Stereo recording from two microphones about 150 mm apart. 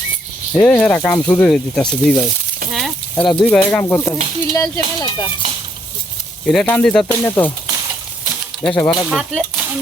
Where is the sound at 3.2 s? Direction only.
5° left (ahead or behind); by 5.3 s 30° left (ahead or behind).